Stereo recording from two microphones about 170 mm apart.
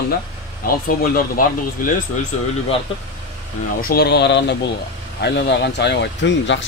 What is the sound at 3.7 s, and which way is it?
Speech, 65° left (ahead or behind).